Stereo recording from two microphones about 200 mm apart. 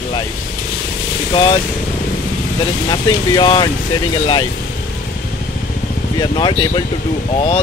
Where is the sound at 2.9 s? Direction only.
20° left (ahead or behind).